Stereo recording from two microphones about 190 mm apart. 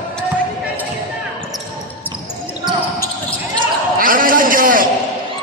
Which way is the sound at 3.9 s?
45° right (ahead or behind).